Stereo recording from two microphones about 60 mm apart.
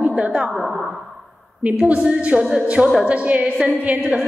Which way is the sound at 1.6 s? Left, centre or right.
Centre.